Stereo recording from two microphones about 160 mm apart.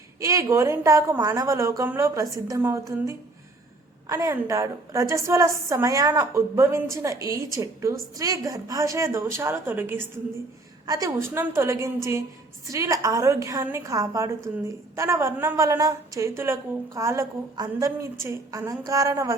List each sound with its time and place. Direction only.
0.2 s a woman's voice: 20° right (ahead or behind)